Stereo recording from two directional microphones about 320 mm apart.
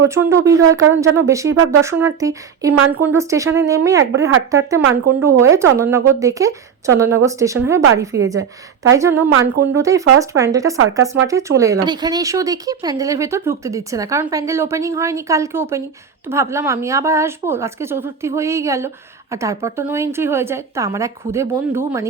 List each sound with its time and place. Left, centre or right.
0.1 s speech: centre
1.5 s speech: right
1.8 s speech: centre